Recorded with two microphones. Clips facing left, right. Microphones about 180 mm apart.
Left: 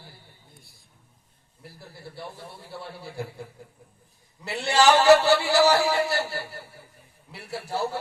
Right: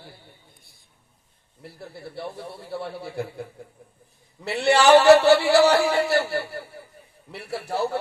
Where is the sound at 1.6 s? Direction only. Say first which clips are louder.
Right 5 dB; 60° right (ahead or behind).